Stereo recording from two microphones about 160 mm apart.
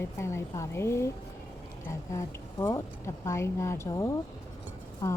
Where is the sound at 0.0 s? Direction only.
15° left (ahead or behind).